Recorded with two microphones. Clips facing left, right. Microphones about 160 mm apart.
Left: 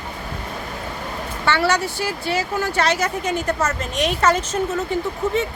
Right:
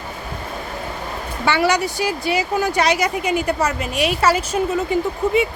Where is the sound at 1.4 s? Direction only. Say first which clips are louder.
Right 2 dB; 15° right (ahead or behind).